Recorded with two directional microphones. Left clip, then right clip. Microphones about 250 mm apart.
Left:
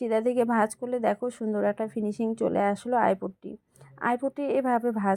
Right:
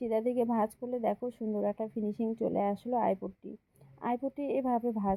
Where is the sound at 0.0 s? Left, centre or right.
Left.